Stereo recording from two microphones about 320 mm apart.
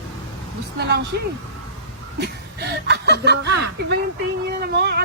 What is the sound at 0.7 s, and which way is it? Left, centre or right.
Speech, right.